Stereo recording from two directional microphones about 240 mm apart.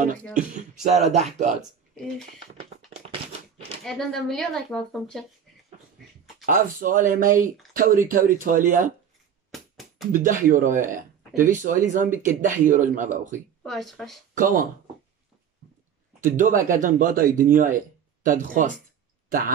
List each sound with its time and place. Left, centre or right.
0.8 s a sound: right
3.8 s speech: centre
6.4 s speech: right
9.5 s music: centre
10.1 s speech: right
12.1 s speech: centre
12.6 s speech: right
13.6 s speech: centre
14.4 s speech: right
16.2 s speech: right